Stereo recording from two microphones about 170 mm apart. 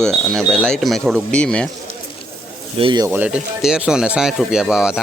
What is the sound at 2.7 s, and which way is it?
Speech, 30° right (ahead or behind).